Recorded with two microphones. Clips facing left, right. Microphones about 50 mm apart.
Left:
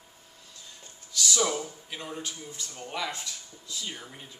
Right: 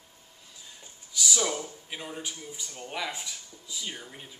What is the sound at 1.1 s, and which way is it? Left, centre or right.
Speech, centre.